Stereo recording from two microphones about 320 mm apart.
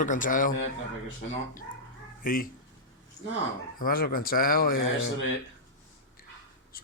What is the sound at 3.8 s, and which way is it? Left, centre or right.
Speech, left.